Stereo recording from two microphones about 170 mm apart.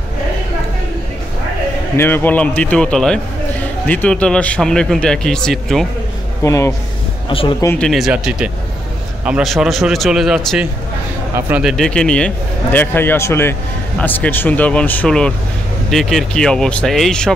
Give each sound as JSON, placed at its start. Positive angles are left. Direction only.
{"t": 2.0, "sound": "a man's voice", "side_deg": 15}
{"t": 6.4, "sound": "speech", "side_deg": 20}
{"t": 7.2, "sound": "speech", "side_deg": 30}
{"t": 7.8, "sound": "a man's voice", "side_deg": 0}
{"t": 11.7, "sound": "a man's voice", "side_deg": 5}